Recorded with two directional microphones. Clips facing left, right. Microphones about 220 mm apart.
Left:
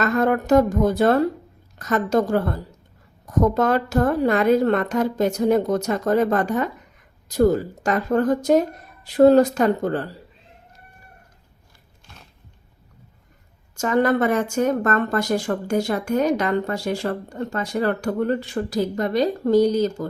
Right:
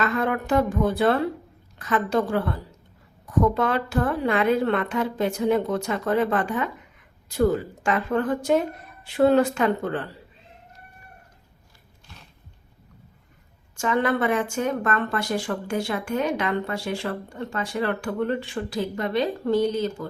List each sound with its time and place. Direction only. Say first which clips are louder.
0.0 s speech: left 5 dB; 40° left (ahead or behind)
13.7 s speech: left 4 dB; 40° left (ahead or behind)